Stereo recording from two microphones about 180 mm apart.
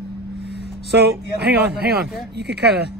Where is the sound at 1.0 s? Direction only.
65° right (ahead or behind).